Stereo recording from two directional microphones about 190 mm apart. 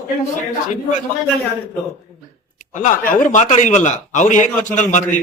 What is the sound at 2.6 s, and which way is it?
A man's voice, 40° left (ahead or behind).